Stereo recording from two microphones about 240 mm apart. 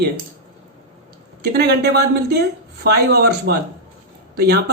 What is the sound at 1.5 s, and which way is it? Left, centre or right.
Speech, right.